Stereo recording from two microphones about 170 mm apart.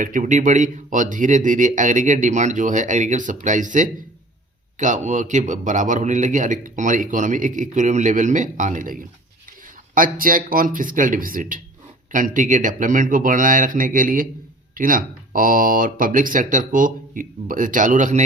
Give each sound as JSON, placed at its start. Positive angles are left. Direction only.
{"t": 0.0, "sound": "a man's voice", "side_deg": -50}